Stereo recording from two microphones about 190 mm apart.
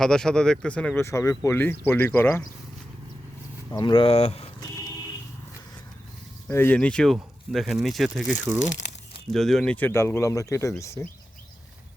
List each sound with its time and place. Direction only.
0.0 s speech: 5° left (ahead or behind)
3.7 s speech: 20° left (ahead or behind)
6.5 s speech: 10° left (ahead or behind)